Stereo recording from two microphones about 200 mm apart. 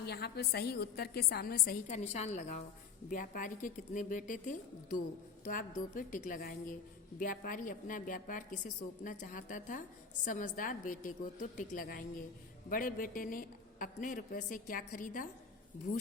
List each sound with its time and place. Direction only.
0.0 s a woman's voice: 55° left (ahead or behind)
2.0 s a woman's voice: 35° left (ahead or behind)